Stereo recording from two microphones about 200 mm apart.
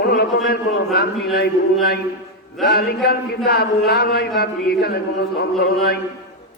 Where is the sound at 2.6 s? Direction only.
55° left (ahead or behind).